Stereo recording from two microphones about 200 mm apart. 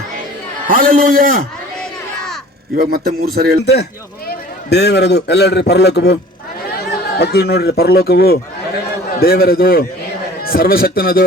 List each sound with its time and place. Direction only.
0.7 s speech: 45° right (ahead or behind)
2.7 s speech: 50° right (ahead or behind)
3.6 s a man's voice: 55° left (ahead or behind)
7.2 s speech: 55° left (ahead or behind)